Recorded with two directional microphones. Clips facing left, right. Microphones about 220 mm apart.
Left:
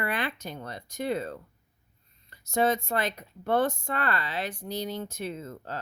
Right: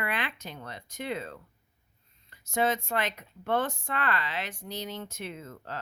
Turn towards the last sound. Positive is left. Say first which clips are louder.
# left 4 dB
turn(degrees=35)  # may be behind; listen again after turning